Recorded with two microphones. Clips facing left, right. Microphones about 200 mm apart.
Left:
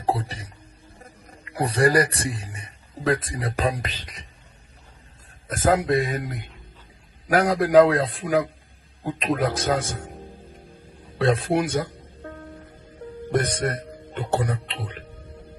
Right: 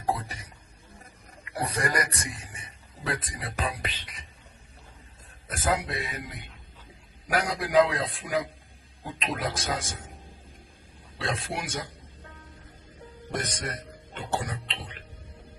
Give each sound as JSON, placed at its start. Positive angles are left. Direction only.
{"t": 0.0, "sound": "a man's voice", "side_deg": 30}
{"t": 5.6, "sound": "a man's voice", "side_deg": 50}
{"t": 11.2, "sound": "music", "side_deg": 50}
{"t": 13.2, "sound": "speech", "side_deg": 55}